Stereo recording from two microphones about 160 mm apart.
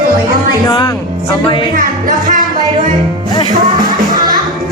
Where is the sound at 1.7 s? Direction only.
55° right (ahead or behind).